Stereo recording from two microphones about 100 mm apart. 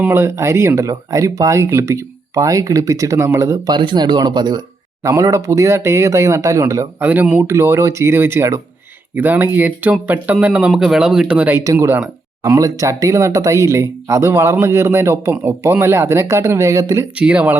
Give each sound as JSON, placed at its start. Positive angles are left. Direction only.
{"t": 0.0, "sound": "speech", "side_deg": -25}
{"t": 3.7, "sound": "speech", "side_deg": -50}
{"t": 5.0, "sound": "speech", "side_deg": -35}
{"t": 7.0, "sound": "speech", "side_deg": -15}
{"t": 7.4, "sound": "speech", "side_deg": -25}
{"t": 11.6, "sound": "speech", "side_deg": -30}
{"t": 17.2, "sound": "speech", "side_deg": -10}